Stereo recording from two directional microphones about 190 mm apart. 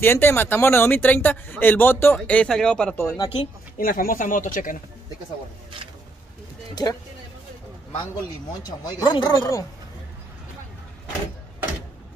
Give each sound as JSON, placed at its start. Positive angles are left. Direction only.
{"t": 0.0, "sound": "speech", "side_deg": 10}
{"t": 3.2, "sound": "speech", "side_deg": 30}
{"t": 3.7, "sound": "speech", "side_deg": 45}
{"t": 6.7, "sound": "speech", "side_deg": 20}
{"t": 8.6, "sound": "speech", "side_deg": 25}